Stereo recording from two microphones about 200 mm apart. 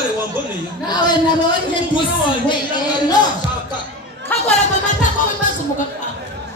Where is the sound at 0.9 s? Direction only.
20° left (ahead or behind).